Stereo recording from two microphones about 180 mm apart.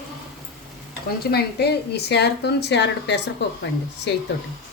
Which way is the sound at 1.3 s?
65° left (ahead or behind).